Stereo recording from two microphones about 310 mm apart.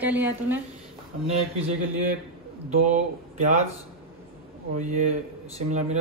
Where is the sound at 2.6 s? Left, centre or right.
Right.